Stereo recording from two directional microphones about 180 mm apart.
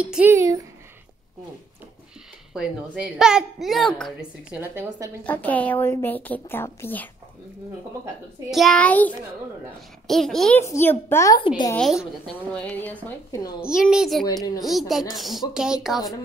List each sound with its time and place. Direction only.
0.0 s speech: 10° right (ahead or behind)
2.5 s a woman's voice: 5° right (ahead or behind)
4.6 s speech: 15° right (ahead or behind)
5.2 s a woman's voice: 10° left (ahead or behind)
8.5 s a woman's voice: centre (ahead or behind)
10.6 s a woman's voice: 15° left (ahead or behind)
11.3 s a woman's voice: 25° left (ahead or behind)
11.7 s a woman's voice: centre (ahead or behind)
13.6 s a woman's voice: 5° right (ahead or behind)
14.2 s a woman's voice: 20° left (ahead or behind)
14.6 s a woman's voice: centre (ahead or behind)